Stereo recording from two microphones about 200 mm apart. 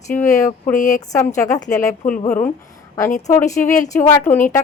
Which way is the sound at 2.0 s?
40° left (ahead or behind).